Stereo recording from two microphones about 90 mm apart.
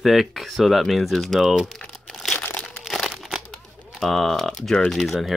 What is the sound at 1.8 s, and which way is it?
Crumpling, 5° left (ahead or behind).